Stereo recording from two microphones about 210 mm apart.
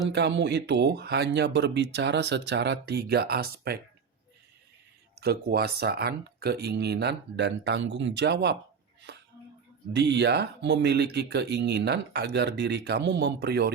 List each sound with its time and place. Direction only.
0.1 s speech: 55° right (ahead or behind)
5.2 s speech: 50° right (ahead or behind)
9.1 s a sound: 50° right (ahead or behind)
9.9 s speech: 55° right (ahead or behind)